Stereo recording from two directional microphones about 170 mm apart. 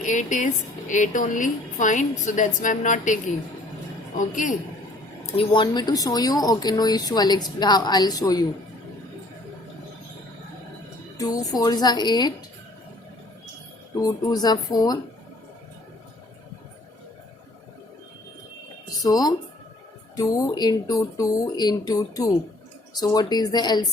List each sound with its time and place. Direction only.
0.0 s a woman's voice: 45° left (ahead or behind)
4.2 s a woman's voice: 50° left (ahead or behind)
5.4 s speech: 30° left (ahead or behind)
11.2 s speech: 20° left (ahead or behind)
14.0 s speech: 20° left (ahead or behind)
19.0 s speech: 20° left (ahead or behind)